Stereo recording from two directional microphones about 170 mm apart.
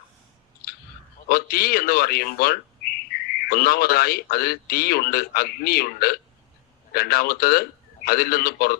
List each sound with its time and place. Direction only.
1.3 s a man's voice: 60° left (ahead or behind)